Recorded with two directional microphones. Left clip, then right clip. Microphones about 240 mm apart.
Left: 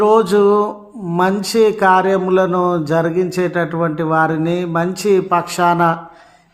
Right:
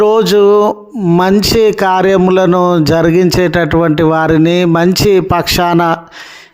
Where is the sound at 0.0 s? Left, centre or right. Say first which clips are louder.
Right 4 dB; right.